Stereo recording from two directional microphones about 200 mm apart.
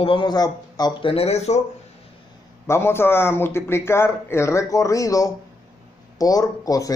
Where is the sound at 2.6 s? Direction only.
10° left (ahead or behind).